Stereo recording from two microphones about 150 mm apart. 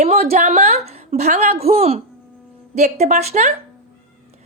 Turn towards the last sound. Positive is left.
turn(degrees=-50)  # may be behind; listen again after turning